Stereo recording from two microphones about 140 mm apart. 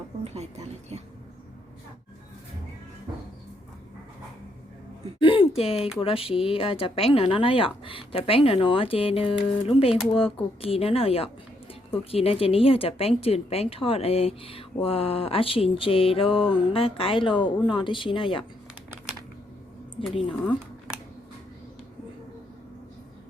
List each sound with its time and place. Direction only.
0.3 s speech: 50° right (ahead or behind)
5.2 s a sound: 40° left (ahead or behind)
6.0 s speech: 40° left (ahead or behind)
9.9 s speech: 5° right (ahead or behind)
10.6 s a woman's voice: 45° left (ahead or behind)
18.7 s typing: 10° right (ahead or behind)
20.0 s speech: centre (ahead or behind)